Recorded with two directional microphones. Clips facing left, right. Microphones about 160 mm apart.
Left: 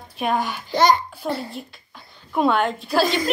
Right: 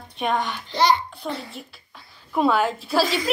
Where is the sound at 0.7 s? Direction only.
45° left (ahead or behind).